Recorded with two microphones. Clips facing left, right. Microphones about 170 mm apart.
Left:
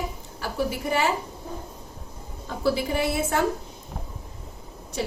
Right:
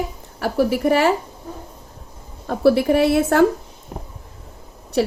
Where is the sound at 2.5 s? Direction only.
65° right (ahead or behind).